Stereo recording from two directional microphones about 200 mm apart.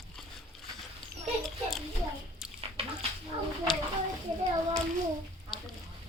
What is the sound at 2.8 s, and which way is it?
Dog, 30° right (ahead or behind).